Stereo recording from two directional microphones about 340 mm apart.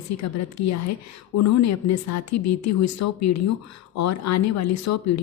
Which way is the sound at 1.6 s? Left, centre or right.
Left.